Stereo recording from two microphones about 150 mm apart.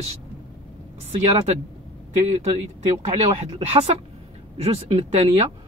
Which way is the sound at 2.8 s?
45° right (ahead or behind).